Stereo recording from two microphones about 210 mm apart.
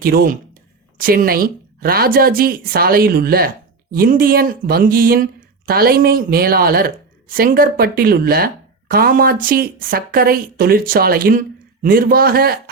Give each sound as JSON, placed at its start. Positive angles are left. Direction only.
{"t": 0.0, "sound": "speech", "side_deg": -45}